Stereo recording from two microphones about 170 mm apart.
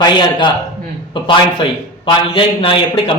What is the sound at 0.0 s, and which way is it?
A man's voice, 25° left (ahead or behind).